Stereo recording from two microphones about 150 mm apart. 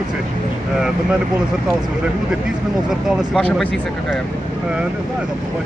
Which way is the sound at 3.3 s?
5° left (ahead or behind).